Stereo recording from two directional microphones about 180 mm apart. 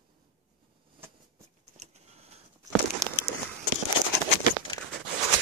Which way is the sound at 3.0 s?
15° right (ahead or behind).